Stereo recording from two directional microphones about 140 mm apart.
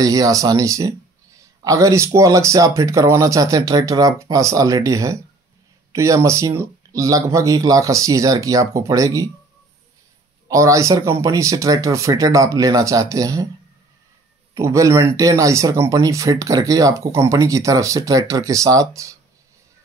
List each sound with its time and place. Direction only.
0.0 s speech: 25° right (ahead or behind)
10.5 s speech: 20° right (ahead or behind)
14.5 s speech: 20° right (ahead or behind)